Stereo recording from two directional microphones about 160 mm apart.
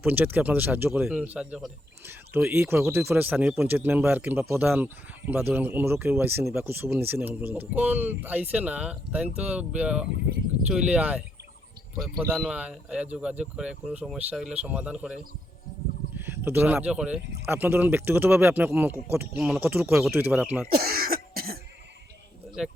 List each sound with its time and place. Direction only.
0.0 s speech: 10° right (ahead or behind)
19.4 s speech: centre (ahead or behind)
19.6 s speech: 15° right (ahead or behind)
20.7 s cough: 65° right (ahead or behind)
22.6 s speech: centre (ahead or behind)